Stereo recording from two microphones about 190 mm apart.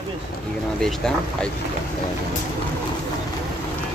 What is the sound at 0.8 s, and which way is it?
Speech, 5° left (ahead or behind).